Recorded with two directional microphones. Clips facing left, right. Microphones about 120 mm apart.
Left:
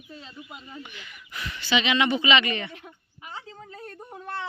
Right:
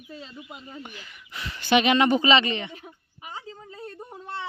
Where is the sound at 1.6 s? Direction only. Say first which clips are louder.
Right 4 dB; 50° right (ahead or behind); by 2.5 s 35° right (ahead or behind).